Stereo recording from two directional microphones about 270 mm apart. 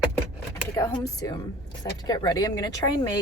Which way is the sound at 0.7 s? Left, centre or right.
Centre.